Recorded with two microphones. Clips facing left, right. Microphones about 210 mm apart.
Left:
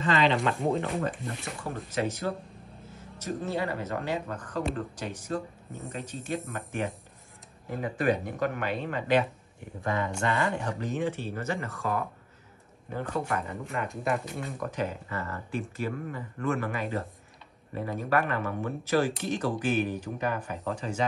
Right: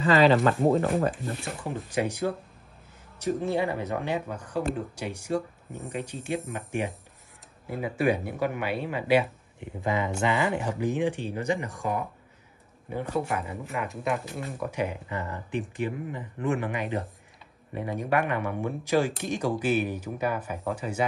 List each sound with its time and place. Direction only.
0.1 s speech: 45° right (ahead or behind)
1.7 s speech: 15° right (ahead or behind)
3.3 s speech: 15° right (ahead or behind)